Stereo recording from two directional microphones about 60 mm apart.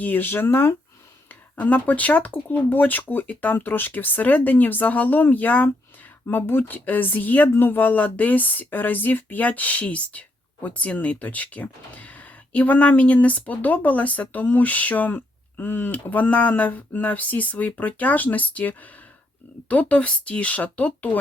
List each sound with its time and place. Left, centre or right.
0.0 s speech: left
1.3 s speech: left